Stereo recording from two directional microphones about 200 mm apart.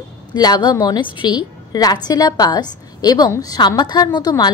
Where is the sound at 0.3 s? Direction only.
20° left (ahead or behind).